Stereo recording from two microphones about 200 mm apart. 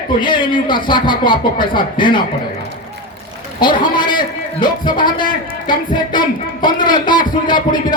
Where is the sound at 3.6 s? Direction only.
25° left (ahead or behind).